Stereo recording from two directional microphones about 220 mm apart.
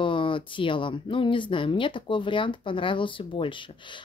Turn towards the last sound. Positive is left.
turn(degrees=20)  # may be behind; listen again after turning